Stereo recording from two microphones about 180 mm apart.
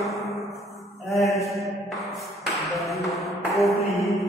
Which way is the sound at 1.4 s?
15° left (ahead or behind).